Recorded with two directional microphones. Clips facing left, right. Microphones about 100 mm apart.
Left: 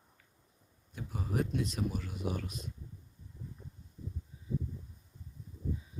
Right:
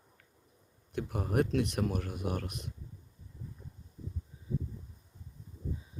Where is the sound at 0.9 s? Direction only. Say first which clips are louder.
Right 5 dB; 60° right (ahead or behind).